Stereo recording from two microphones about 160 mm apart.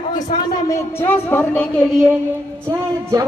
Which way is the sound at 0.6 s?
15° left (ahead or behind).